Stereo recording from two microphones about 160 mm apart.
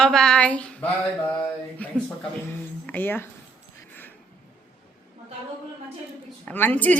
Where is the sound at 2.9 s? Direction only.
10° left (ahead or behind).